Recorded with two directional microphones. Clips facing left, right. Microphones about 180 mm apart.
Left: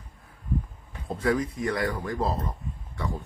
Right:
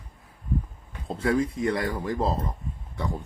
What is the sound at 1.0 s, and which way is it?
Speech, 25° right (ahead or behind).